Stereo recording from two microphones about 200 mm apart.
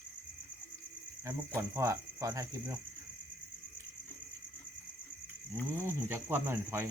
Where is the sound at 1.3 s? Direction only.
15° right (ahead or behind).